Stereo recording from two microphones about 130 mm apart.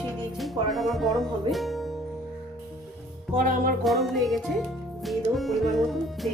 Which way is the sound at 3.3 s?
90° right.